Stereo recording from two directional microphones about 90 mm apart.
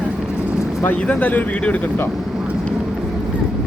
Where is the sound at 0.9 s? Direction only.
15° left (ahead or behind).